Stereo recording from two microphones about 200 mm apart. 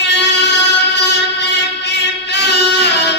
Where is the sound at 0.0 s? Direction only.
60° left (ahead or behind).